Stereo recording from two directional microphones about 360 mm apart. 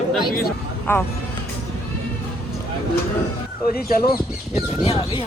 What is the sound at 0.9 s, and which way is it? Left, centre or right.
Speech, centre.